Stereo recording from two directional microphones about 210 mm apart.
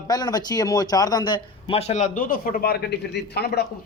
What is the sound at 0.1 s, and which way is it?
A man's voice, 20° left (ahead or behind).